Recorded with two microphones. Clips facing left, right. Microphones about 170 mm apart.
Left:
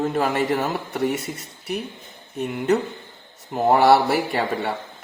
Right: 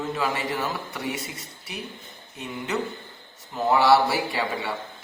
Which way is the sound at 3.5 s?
50° left (ahead or behind).